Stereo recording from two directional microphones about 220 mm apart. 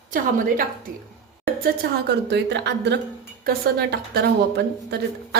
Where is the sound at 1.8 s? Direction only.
50° right (ahead or behind).